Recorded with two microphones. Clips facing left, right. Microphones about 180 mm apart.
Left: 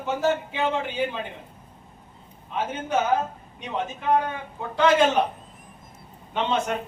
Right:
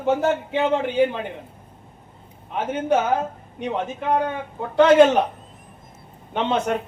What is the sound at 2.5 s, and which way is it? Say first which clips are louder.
Speech: right 5 dB; 55° right (ahead or behind).